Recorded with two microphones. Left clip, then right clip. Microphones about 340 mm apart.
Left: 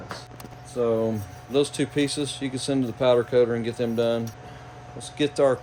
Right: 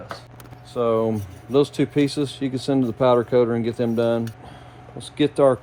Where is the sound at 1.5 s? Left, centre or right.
Centre.